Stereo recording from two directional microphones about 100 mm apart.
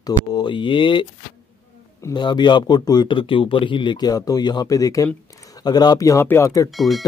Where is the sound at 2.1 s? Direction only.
50° left (ahead or behind).